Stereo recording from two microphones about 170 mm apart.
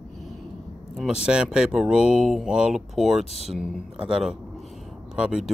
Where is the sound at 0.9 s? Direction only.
5° right (ahead or behind).